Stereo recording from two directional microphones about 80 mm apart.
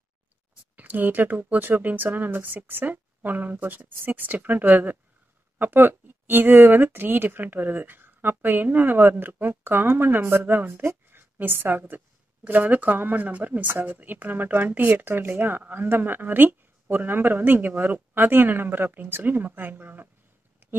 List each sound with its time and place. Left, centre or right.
0.7 s speech: right